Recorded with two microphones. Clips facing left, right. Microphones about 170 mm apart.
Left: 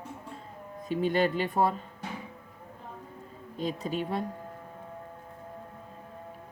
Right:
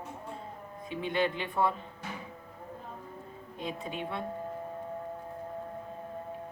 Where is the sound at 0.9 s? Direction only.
40° left (ahead or behind).